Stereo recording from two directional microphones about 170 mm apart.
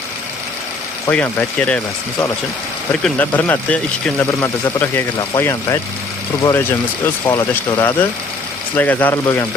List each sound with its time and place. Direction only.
1.1 s speech: 5° left (ahead or behind)
3.0 s speech: 10° left (ahead or behind)